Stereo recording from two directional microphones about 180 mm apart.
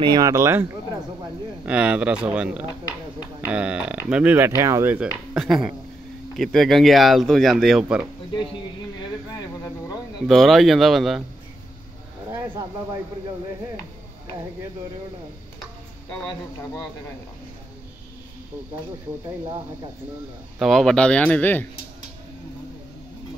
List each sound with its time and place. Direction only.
0.0 s speech: 20° right (ahead or behind); by 2.6 s 5° right (ahead or behind)
2.6 s a sound: 20° left (ahead or behind)
3.3 s speech: 5° right (ahead or behind)
9.3 s a sound: 20° left (ahead or behind)
10.2 s speech: centre (ahead or behind)
20.5 s speech: centre (ahead or behind)